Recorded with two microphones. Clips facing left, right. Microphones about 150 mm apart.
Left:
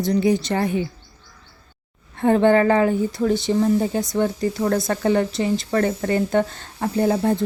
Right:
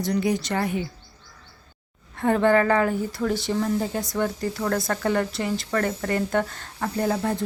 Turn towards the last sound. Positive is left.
turn(degrees=25)  # may be behind; listen again after turning